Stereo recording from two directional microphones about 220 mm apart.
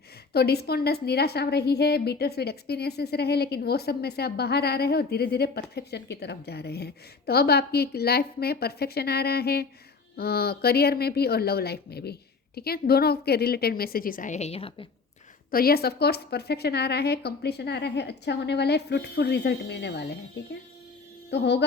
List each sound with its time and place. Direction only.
0.3 s a woman's voice: 45° left (ahead or behind); by 14.8 s 25° left (ahead or behind)
15.4 s a woman's voice: 45° left (ahead or behind)
21.2 s music: 50° left (ahead or behind)